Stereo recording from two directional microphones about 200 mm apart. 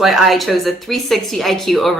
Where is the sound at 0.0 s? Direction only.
Centre (ahead or behind).